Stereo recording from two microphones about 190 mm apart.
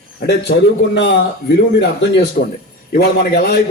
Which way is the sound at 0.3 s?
60° left (ahead or behind).